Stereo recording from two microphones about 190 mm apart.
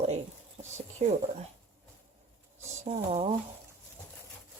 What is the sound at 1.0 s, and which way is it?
Speech, 35° right (ahead or behind).